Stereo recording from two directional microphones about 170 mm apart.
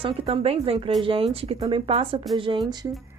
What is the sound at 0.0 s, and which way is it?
Speech, 30° right (ahead or behind).